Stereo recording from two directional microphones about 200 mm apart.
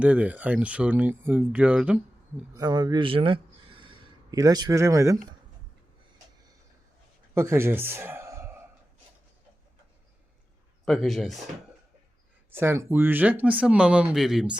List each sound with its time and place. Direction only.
0.0 s speech: 5° right (ahead or behind)
2.5 s speech: 20° right (ahead or behind)
7.3 s speech: 15° right (ahead or behind)
10.8 s speech: centre (ahead or behind)
12.5 s speech: 10° right (ahead or behind)